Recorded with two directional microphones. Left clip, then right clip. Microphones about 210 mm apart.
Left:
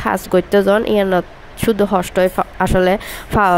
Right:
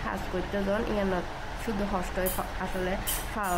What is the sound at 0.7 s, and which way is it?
Speech, 40° left (ahead or behind).